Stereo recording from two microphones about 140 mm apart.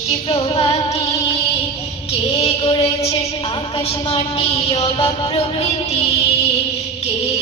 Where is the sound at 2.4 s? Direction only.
40° left (ahead or behind).